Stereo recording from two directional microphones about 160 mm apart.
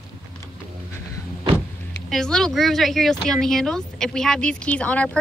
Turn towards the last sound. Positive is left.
turn(degrees=10)  # may be behind; listen again after turning